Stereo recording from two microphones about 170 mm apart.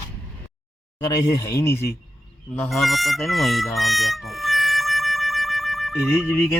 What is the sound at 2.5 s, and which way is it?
Speech, 5° left (ahead or behind).